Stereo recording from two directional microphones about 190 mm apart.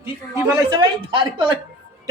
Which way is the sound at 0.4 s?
20° right (ahead or behind).